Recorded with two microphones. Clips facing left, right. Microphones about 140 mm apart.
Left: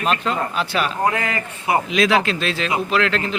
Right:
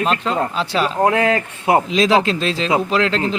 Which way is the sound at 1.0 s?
60° right (ahead or behind).